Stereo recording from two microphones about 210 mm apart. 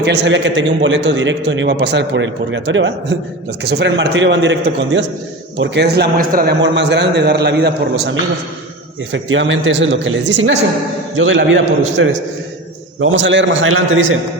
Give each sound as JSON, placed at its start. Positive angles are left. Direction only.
{"t": 0.0, "sound": "a man's voice", "side_deg": -55}
{"t": 9.1, "sound": "a man's voice", "side_deg": -65}